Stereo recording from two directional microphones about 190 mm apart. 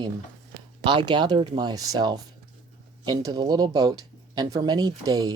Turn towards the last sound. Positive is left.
turn(degrees=-20)  # may be behind; listen again after turning